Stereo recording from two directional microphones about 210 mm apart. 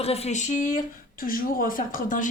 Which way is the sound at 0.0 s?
30° left (ahead or behind).